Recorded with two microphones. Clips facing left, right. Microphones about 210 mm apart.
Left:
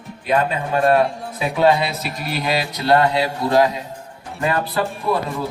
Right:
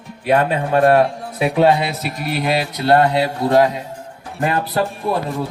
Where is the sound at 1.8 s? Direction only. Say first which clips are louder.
Right 1 dB; 60° right (ahead or behind).